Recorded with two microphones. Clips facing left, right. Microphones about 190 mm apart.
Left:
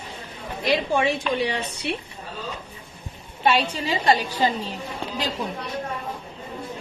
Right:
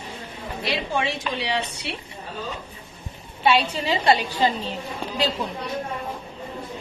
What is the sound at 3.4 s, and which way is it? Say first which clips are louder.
A woman's voice: right 1 dB; 45° left (ahead or behind).